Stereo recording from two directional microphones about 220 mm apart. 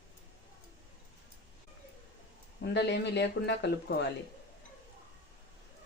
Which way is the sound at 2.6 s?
50° left (ahead or behind).